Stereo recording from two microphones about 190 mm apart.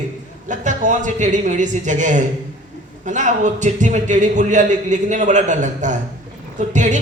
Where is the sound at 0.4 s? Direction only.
40° right (ahead or behind).